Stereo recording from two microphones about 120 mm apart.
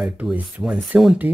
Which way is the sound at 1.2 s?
15° right (ahead or behind).